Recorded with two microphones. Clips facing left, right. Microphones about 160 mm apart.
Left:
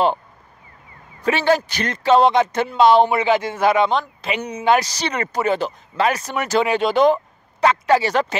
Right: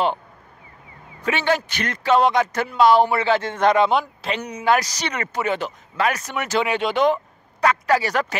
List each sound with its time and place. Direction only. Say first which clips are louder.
1.2 s speech: left 4 dB; 35° left (ahead or behind); by 3.9 s 5° left (ahead or behind)
3.9 s speech: right 1 dB; 10° right (ahead or behind)
4.4 s speech: left 2 dB; 25° left (ahead or behind)
7.6 s speech: left 3 dB; 25° left (ahead or behind)